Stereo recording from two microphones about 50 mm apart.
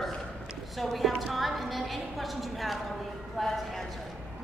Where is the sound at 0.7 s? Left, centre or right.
Centre.